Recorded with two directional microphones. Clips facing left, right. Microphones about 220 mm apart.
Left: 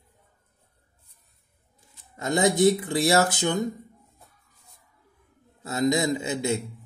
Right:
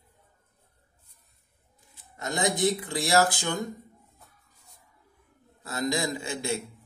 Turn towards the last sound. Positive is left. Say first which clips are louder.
# left 5 dB
turn(degrees=20)  # may be behind; listen again after turning